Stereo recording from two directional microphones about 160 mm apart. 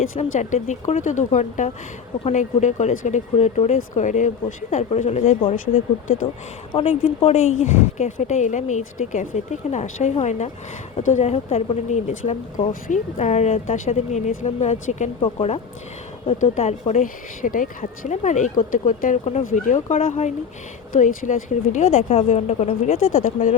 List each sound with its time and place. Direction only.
0.2 s speech: 50° left (ahead or behind)
7.2 s speech: 40° left (ahead or behind)
20.9 s speech: 55° left (ahead or behind)